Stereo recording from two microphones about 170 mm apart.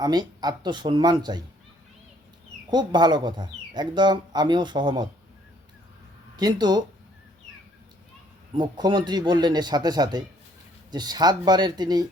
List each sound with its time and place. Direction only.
0.0 s speech: 25° right (ahead or behind)
2.6 s speech: 25° right (ahead or behind)
6.3 s speech: 25° right (ahead or behind)
8.5 s speech: 25° right (ahead or behind)